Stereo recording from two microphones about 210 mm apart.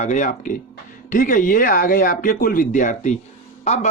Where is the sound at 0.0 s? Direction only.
35° left (ahead or behind).